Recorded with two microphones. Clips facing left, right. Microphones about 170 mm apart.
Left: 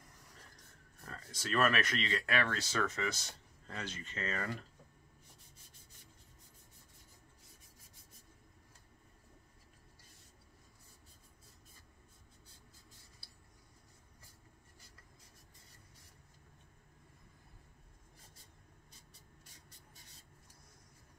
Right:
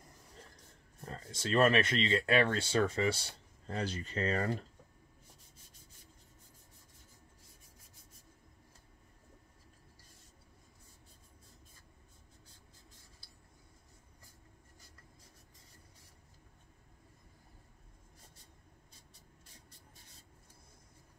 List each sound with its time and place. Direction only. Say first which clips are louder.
1.0 s speech: right 5 dB; 25° right (ahead or behind)